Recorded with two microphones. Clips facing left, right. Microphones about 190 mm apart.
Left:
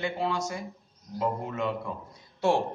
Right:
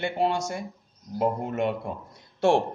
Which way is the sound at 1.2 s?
55° right (ahead or behind).